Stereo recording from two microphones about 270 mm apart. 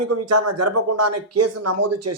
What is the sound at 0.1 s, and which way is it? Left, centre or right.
Speech, right.